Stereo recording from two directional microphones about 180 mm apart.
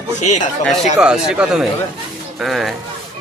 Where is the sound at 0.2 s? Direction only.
40° left (ahead or behind).